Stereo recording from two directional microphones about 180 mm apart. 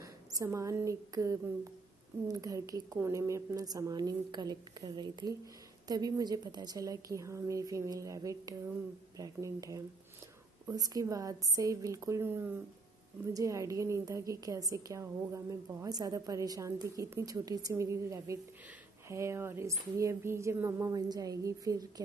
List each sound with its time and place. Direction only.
0.0 s a woman's voice: 20° right (ahead or behind)